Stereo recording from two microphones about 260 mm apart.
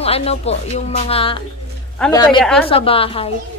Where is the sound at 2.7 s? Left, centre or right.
Left.